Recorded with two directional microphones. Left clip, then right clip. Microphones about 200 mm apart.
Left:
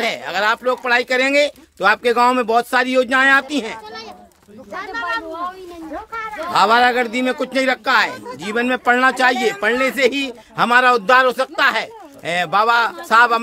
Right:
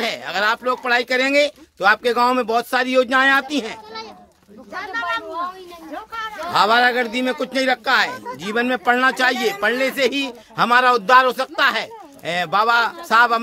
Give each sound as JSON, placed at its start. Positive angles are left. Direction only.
{"t": 0.0, "sound": "speech", "side_deg": 0}
{"t": 4.7, "sound": "speech", "side_deg": -35}
{"t": 6.1, "sound": "a sound", "side_deg": -20}
{"t": 6.5, "sound": "a man's voice", "side_deg": -5}